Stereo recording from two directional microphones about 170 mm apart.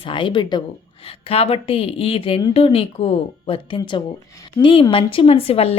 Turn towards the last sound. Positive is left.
turn(degrees=35)  # may be behind; listen again after turning